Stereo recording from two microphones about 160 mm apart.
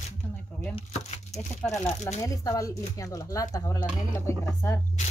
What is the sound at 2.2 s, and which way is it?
Speech, 20° left (ahead or behind).